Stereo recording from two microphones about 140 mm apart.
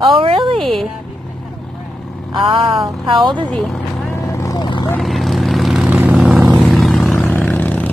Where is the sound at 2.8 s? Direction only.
Centre (ahead or behind).